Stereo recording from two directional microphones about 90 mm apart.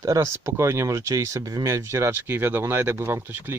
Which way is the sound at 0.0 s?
40° right (ahead or behind).